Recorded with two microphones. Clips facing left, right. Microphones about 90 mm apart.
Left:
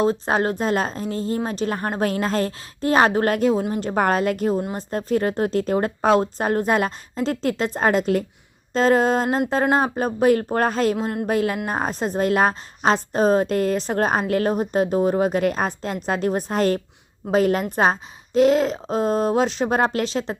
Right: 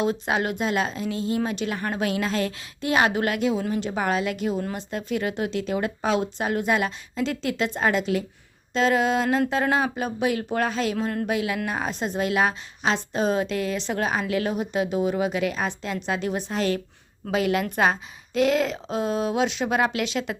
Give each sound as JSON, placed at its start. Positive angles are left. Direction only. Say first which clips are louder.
{"t": 0.0, "sound": "a woman's voice", "louder": "left 4 dB", "side_deg": 40}